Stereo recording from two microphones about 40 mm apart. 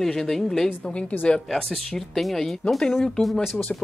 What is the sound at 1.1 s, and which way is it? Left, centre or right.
Speech, left.